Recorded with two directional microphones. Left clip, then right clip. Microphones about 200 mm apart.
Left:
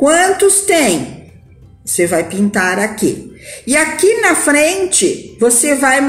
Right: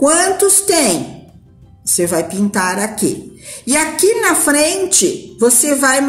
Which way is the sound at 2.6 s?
55° right (ahead or behind).